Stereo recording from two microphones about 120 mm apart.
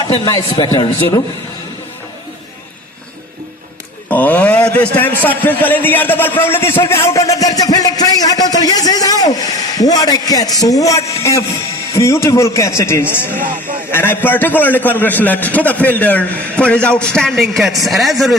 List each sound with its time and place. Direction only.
0.3 s a man's voice: 35° left (ahead or behind)
4.1 s a man's voice: 15° left (ahead or behind)